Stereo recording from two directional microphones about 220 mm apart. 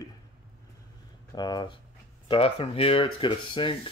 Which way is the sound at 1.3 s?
20° left (ahead or behind).